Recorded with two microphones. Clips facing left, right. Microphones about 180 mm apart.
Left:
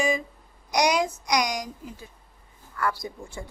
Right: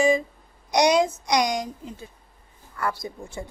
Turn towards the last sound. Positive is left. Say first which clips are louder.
# right 2 dB
turn(degrees=-20)  # may be behind; listen again after turning